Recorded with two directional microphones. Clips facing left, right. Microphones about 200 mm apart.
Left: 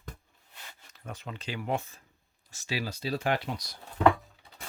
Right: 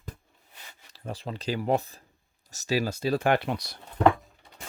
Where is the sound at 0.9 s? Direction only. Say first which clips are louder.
Right 6 dB; 30° right (ahead or behind); by 3.8 s 65° right (ahead or behind).